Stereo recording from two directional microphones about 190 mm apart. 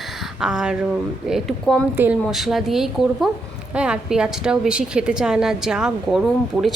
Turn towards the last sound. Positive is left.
turn(degrees=0)  # may be behind; listen again after turning